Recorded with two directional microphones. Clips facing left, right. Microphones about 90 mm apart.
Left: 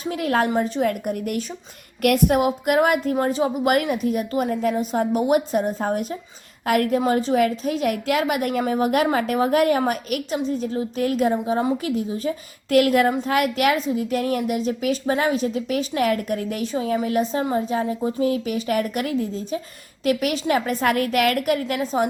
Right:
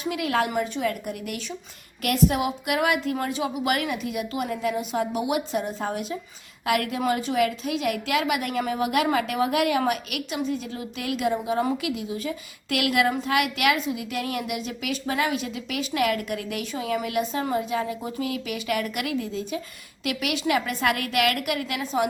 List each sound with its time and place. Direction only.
0.0 s a woman's voice: 40° left (ahead or behind)
7.0 s a woman's voice: 30° left (ahead or behind)